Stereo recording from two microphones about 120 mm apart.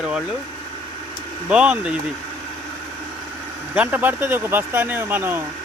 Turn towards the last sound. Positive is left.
turn(degrees=-15)  # may be behind; listen again after turning